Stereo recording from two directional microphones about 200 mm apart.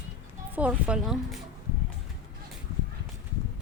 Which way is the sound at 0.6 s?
5° right (ahead or behind).